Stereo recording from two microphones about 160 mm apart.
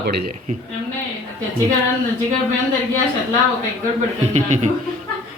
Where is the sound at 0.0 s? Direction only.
80° right.